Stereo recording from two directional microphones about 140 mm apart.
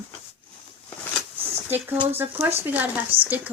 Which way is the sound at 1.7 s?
15° right (ahead or behind).